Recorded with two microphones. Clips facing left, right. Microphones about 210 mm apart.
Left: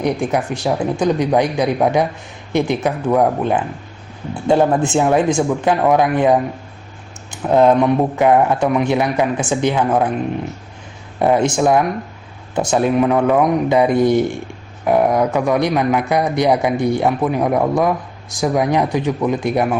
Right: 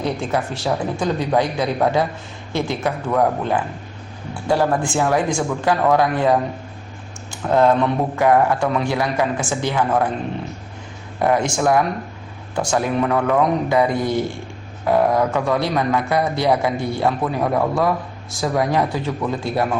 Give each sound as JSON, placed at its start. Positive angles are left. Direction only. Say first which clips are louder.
{"t": 0.0, "sound": "a man's voice", "louder": "left 4 dB", "side_deg": 15}
{"t": 11.2, "sound": "a man's voice", "louder": "left 4 dB", "side_deg": 25}